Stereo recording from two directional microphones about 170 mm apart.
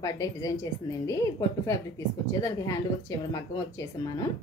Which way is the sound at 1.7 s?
20° left (ahead or behind).